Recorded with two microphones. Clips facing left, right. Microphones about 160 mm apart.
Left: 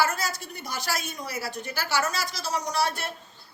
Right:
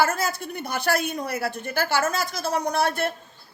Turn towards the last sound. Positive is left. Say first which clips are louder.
# right 4 dB
turn(degrees=-55)  # may be behind; listen again after turning